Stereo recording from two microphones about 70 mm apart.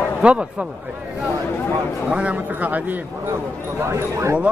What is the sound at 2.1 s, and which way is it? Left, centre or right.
Speech, right.